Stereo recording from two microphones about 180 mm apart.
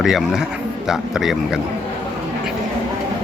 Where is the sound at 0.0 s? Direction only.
Centre (ahead or behind).